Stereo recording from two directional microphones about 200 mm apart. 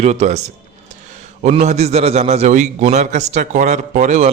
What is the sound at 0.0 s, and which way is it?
A man's voice, 35° right (ahead or behind).